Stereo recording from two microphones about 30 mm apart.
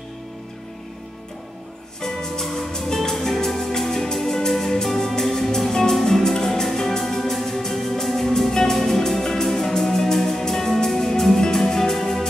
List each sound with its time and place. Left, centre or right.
2.0 s music: centre